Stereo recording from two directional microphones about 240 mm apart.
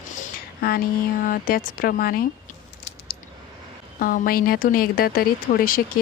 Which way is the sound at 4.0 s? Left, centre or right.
Left.